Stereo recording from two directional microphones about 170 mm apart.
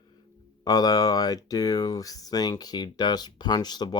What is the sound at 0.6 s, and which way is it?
Speech, 20° left (ahead or behind).